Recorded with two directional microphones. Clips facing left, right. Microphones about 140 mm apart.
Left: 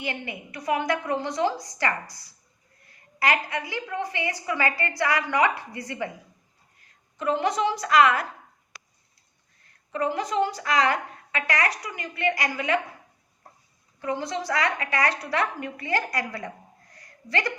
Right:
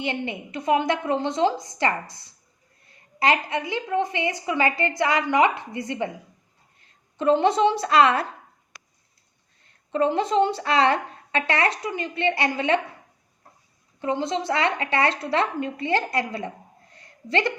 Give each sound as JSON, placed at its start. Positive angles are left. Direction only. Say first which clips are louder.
{"t": 0.0, "sound": "a woman's voice", "louder": "right 5 dB", "side_deg": -25}
{"t": 7.2, "sound": "a woman's voice", "louder": "right 6 dB", "side_deg": -25}
{"t": 9.9, "sound": "a woman's voice", "louder": "right 5 dB", "side_deg": -25}
{"t": 14.0, "sound": "a woman's voice", "louder": "right 4 dB", "side_deg": -25}
{"t": 16.9, "sound": "a sound", "louder": "right 4 dB", "side_deg": -25}